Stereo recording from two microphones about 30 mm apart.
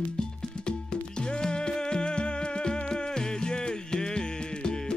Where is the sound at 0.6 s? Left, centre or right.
Left.